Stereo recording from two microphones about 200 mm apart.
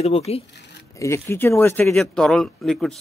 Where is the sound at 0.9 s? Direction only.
15° left (ahead or behind).